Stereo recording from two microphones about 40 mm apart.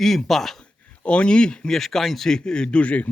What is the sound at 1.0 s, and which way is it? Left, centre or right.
Speech, left.